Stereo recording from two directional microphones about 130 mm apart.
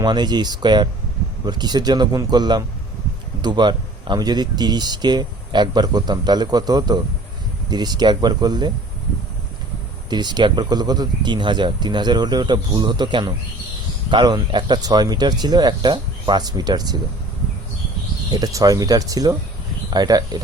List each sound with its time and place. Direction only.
0.0 s speech: 35° right (ahead or behind)
10.1 s speech: 35° right (ahead or behind)
18.3 s speech: 30° right (ahead or behind)